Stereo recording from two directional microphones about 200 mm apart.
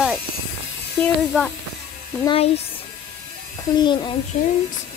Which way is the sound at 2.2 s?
30° left (ahead or behind).